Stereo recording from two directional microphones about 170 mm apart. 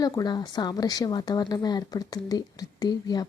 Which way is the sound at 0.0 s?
20° left (ahead or behind).